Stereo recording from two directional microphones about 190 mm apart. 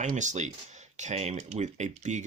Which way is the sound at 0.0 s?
40° right (ahead or behind).